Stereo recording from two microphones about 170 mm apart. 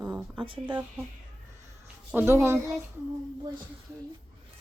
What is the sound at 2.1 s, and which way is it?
Speech, 10° right (ahead or behind).